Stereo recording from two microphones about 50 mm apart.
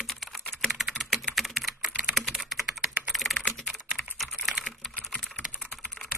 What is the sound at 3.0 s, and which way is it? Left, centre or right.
Computer keyboard, centre.